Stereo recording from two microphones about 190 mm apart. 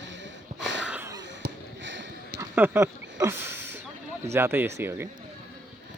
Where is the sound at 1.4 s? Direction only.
75° right (ahead or behind).